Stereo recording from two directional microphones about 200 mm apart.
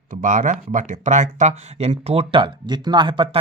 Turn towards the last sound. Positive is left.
turn(degrees=-25)  # may be behind; listen again after turning